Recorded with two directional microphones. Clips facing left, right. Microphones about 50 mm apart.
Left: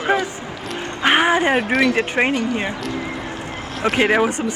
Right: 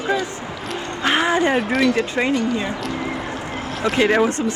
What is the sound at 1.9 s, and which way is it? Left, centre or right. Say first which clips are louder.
Speech: left 2 dB; left.